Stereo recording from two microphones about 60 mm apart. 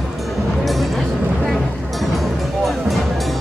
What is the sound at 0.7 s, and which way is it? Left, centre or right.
Music, centre.